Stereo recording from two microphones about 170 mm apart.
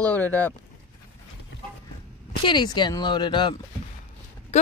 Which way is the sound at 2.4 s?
25° left (ahead or behind).